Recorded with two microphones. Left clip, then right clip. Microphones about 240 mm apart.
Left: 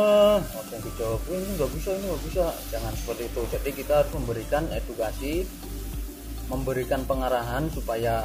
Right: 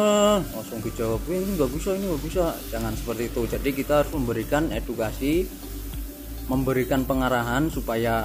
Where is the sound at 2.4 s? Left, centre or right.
Right.